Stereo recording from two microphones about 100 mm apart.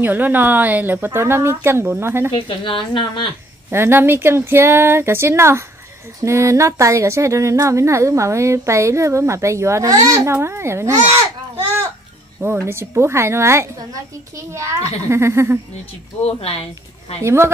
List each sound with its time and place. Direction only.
0.0 s speech: 20° right (ahead or behind)
2.3 s a woman's voice: 60° left (ahead or behind)
3.7 s speech: 25° right (ahead or behind)
12.6 s speech: 25° right (ahead or behind)
16.3 s speech: 85° left
17.2 s speech: 25° right (ahead or behind)